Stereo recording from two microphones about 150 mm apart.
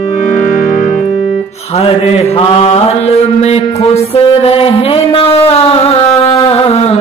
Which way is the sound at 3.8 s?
40° left (ahead or behind).